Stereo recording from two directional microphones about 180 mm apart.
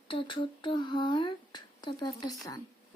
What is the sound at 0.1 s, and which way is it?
Speech, 25° left (ahead or behind).